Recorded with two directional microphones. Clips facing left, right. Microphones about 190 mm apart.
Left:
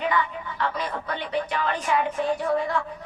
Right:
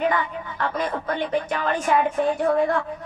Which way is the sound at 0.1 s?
45° right (ahead or behind).